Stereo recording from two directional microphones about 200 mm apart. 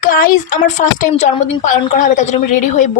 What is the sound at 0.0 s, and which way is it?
Speech, 45° left (ahead or behind).